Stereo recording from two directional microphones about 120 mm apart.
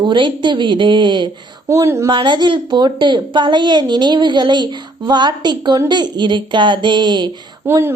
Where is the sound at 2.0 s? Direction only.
40° right (ahead or behind).